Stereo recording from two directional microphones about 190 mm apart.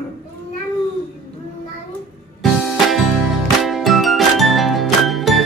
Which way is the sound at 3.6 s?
Centre (ahead or behind).